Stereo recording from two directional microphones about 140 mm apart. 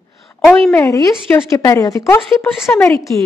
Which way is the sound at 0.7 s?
25° left (ahead or behind).